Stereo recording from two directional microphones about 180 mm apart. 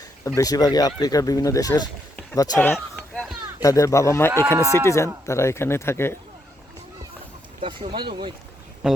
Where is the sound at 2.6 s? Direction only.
5° left (ahead or behind).